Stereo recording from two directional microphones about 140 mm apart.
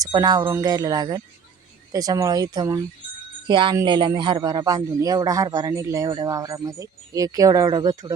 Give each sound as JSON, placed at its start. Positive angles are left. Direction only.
{"t": 0.0, "sound": "a man's voice", "side_deg": -30}